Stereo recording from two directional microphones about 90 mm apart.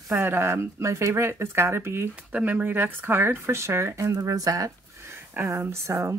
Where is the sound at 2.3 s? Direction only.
15° right (ahead or behind).